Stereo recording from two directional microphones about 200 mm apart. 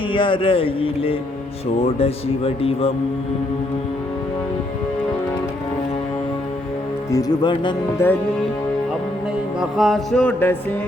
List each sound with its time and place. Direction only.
0.1 s speech: 25° left (ahead or behind)
7.1 s speech: 20° left (ahead or behind)
9.6 s music: centre (ahead or behind)